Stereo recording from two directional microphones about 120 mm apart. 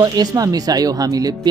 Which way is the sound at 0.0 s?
35° right (ahead or behind).